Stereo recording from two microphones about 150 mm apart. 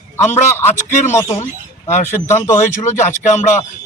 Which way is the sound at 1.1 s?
20° left (ahead or behind).